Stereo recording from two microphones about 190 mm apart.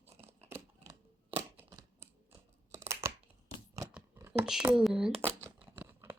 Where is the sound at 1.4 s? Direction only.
15° right (ahead or behind).